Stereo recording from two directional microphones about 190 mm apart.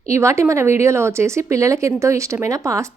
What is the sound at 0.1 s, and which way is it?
Speech, 15° right (ahead or behind).